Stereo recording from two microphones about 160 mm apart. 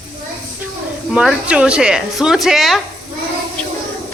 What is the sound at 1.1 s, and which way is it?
Speech, 5° right (ahead or behind).